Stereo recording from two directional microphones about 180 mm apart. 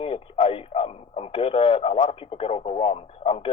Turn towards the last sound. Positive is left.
turn(degrees=30)  # may be behind; listen again after turning